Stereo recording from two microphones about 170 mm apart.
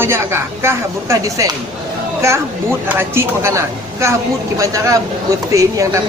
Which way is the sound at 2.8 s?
15° right (ahead or behind).